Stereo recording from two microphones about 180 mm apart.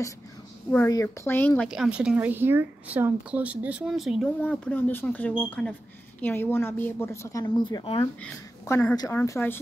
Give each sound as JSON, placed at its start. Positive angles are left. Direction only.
{"t": 0.8, "sound": "speech", "side_deg": 15}
{"t": 1.7, "sound": "speech", "side_deg": -5}
{"t": 8.2, "sound": "speech", "side_deg": 10}